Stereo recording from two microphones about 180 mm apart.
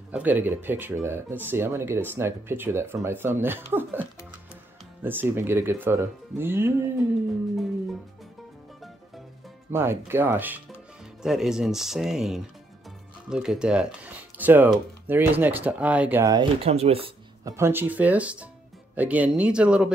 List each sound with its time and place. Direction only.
0.1 s speech: 10° right (ahead or behind)
5.0 s speech: 10° right (ahead or behind)
9.7 s speech: 15° right (ahead or behind)
16.3 s speech: 35° right (ahead or behind)
17.5 s speech: 15° right (ahead or behind)